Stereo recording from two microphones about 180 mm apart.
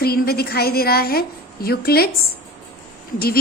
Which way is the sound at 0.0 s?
60° left (ahead or behind).